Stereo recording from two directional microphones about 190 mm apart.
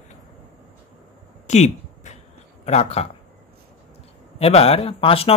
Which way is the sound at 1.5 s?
35° left (ahead or behind).